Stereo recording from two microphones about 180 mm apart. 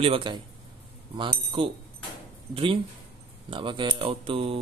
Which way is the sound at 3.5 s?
30° right (ahead or behind).